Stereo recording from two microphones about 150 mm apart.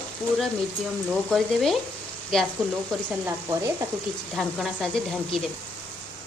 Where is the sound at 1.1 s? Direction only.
Centre (ahead or behind).